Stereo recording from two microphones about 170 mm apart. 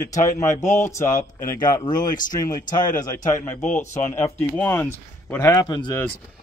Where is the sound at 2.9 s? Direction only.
50° left (ahead or behind).